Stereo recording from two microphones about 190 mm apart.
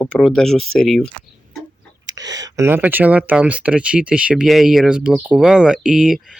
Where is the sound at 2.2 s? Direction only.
20° right (ahead or behind).